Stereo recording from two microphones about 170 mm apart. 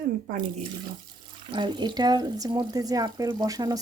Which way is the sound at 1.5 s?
25° right (ahead or behind).